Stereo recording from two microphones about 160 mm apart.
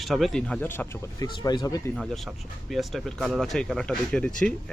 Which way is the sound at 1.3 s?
30° left (ahead or behind).